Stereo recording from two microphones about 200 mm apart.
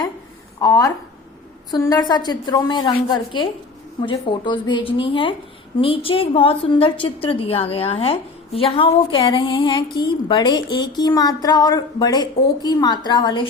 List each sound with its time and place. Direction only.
0.6 s a woman's voice: 20° left (ahead or behind)